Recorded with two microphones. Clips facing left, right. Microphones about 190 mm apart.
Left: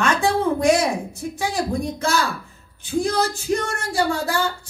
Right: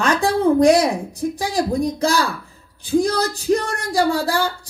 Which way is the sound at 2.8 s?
35° right (ahead or behind).